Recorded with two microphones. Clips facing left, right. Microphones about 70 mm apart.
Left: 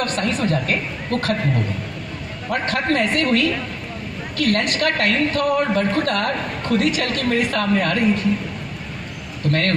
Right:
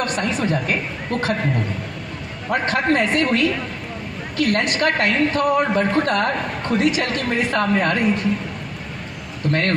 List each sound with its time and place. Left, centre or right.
0.0 s a woman's voice: centre
2.5 s a woman's voice: right
9.5 s a woman's voice: right